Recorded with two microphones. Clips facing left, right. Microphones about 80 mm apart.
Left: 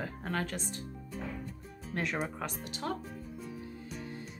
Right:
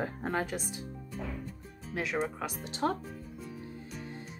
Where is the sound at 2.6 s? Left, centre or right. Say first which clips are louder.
Right 8 dB; right.